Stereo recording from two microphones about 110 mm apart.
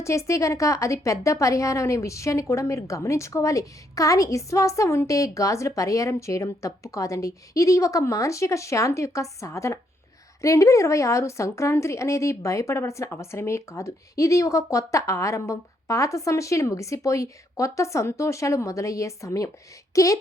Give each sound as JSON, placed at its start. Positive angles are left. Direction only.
{"t": 0.0, "sound": "a woman's voice", "side_deg": 25}